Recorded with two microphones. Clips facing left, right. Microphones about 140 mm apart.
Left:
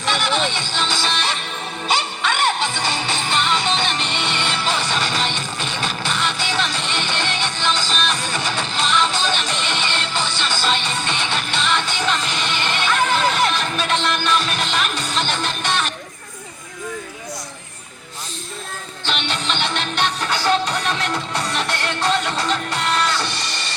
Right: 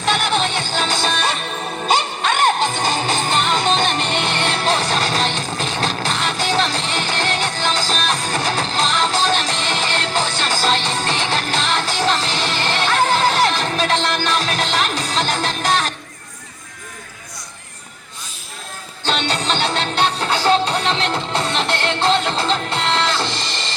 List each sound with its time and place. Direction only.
0.0 s music: 45° right (ahead or behind)
19.3 s music: 35° right (ahead or behind)